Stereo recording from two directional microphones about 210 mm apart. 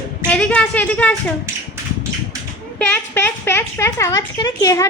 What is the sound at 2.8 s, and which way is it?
A child's voice, 10° left (ahead or behind).